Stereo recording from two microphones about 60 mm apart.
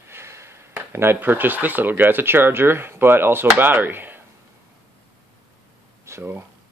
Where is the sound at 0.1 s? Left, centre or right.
Right.